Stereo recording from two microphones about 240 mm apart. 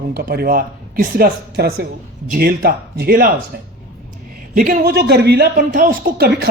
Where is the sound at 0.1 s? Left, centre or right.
Right.